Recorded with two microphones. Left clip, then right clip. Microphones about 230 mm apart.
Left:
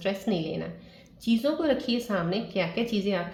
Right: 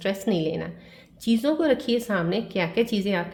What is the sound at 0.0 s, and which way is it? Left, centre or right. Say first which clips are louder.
A woman's voice: right 4 dB; right.